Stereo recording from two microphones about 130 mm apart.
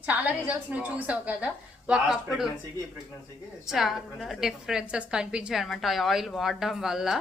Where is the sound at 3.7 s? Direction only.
Centre (ahead or behind).